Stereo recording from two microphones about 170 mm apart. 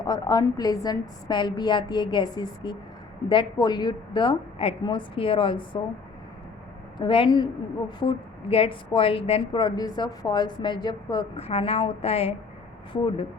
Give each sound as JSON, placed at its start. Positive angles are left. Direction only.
{"t": 0.0, "sound": "a woman's voice", "side_deg": 25}
{"t": 7.0, "sound": "a woman's voice", "side_deg": 30}
{"t": 11.3, "sound": "a woman's voice", "side_deg": 35}